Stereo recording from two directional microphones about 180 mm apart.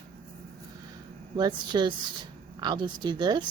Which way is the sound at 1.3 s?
25° right (ahead or behind).